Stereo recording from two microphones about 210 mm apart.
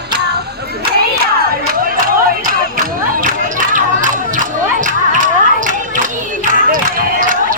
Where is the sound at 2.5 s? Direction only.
40° right (ahead or behind).